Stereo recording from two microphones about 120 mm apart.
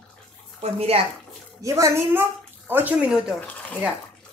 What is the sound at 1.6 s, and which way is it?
A woman's voice, 25° right (ahead or behind).